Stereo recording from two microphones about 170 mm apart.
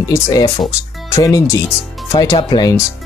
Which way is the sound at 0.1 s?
25° left (ahead or behind).